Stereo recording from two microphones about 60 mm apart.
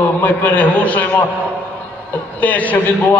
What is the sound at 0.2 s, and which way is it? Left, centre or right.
A man's voice, left.